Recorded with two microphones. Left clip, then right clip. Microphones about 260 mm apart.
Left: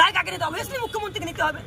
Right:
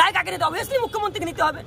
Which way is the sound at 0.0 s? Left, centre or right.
Right.